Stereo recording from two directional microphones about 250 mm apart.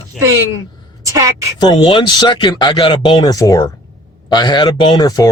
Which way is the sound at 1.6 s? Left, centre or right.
Centre.